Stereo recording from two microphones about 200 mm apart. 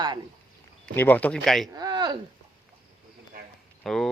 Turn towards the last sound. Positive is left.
turn(degrees=5)  # may be behind; listen again after turning